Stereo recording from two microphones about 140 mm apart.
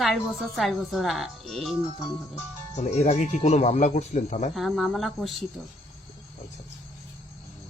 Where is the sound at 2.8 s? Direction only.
55° left (ahead or behind).